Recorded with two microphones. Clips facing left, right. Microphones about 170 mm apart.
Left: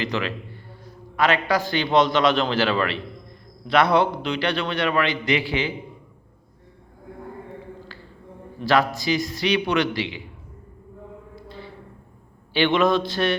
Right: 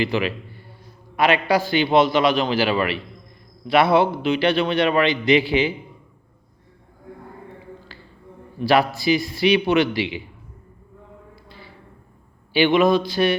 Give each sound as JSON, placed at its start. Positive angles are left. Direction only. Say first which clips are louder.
{"t": 0.0, "sound": "a man's voice", "louder": "right 4 dB", "side_deg": -15}
{"t": 8.6, "sound": "a man's voice", "louder": "right 3 dB", "side_deg": -15}
{"t": 12.5, "sound": "a man's voice", "louder": "right 3 dB", "side_deg": -5}